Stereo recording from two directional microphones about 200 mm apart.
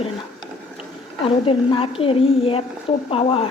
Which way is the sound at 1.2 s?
30° left (ahead or behind).